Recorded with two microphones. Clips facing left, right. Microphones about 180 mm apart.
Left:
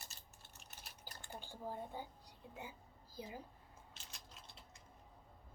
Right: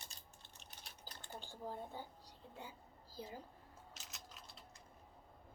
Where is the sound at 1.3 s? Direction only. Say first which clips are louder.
Left 1 dB; 15° left (ahead or behind).